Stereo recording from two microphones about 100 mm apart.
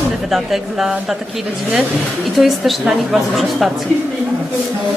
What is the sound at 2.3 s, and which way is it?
A woman's voice, centre (ahead or behind).